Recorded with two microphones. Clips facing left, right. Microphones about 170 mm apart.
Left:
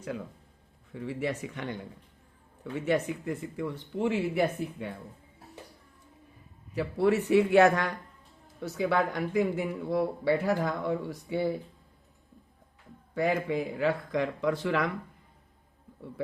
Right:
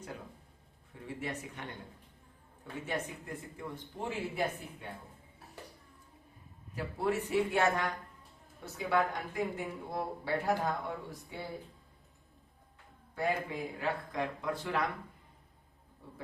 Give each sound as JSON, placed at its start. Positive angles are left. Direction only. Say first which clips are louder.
{"t": 1.0, "sound": "speech", "louder": "left 7 dB", "side_deg": 90}
{"t": 2.8, "sound": "speech", "louder": "left 10 dB", "side_deg": 80}
{"t": 6.7, "sound": "speech", "louder": "left 8 dB", "side_deg": 80}
{"t": 13.1, "sound": "speech", "louder": "left 6 dB", "side_deg": 90}